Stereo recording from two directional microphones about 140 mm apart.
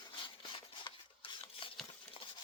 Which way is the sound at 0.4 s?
35° left (ahead or behind).